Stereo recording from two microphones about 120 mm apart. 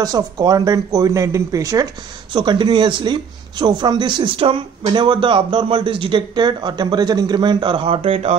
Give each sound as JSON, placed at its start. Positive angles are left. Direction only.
{"t": 0.0, "sound": "speech", "side_deg": -35}
{"t": 2.3, "sound": "speech", "side_deg": -40}